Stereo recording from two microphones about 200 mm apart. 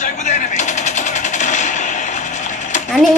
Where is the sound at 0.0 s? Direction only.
35° left (ahead or behind).